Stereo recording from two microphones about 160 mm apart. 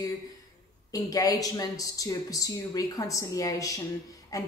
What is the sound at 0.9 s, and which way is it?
Speech, 20° left (ahead or behind).